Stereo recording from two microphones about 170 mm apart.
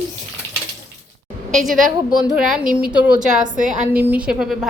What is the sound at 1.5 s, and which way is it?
A woman's voice, centre (ahead or behind).